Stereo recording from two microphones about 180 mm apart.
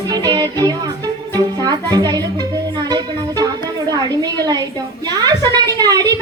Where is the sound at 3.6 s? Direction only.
20° right (ahead or behind).